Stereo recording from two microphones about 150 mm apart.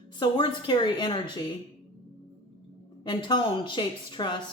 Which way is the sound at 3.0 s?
30° left (ahead or behind).